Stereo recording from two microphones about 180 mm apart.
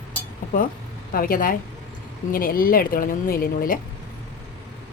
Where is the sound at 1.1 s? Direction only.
50° left (ahead or behind).